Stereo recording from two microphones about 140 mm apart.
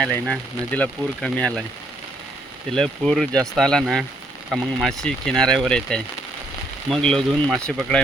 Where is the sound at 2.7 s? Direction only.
5° left (ahead or behind).